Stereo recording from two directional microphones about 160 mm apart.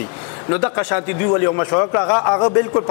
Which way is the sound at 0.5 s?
15° left (ahead or behind).